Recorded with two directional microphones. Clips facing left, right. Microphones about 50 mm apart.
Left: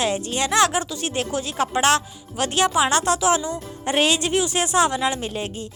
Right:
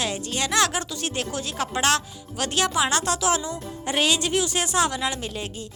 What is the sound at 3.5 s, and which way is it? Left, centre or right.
Speech, left.